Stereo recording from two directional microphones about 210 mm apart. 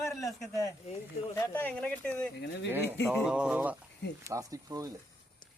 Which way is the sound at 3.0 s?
Centre (ahead or behind).